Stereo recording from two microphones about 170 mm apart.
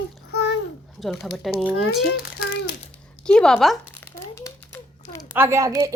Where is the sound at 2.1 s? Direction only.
60° left (ahead or behind).